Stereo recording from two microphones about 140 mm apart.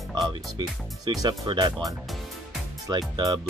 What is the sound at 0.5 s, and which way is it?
Speech, 30° right (ahead or behind).